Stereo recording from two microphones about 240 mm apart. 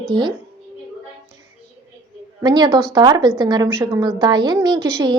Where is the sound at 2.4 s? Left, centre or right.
Centre.